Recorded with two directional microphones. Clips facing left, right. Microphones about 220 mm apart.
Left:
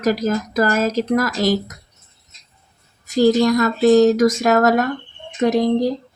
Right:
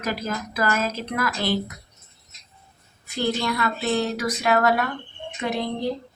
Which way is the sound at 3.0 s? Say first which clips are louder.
Left 11 dB; 40° left (ahead or behind).